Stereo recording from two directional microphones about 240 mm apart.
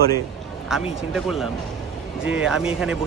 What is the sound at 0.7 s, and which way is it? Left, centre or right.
Speech, centre.